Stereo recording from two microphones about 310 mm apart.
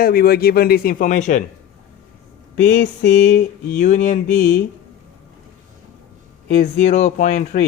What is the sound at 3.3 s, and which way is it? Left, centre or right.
Speech, left.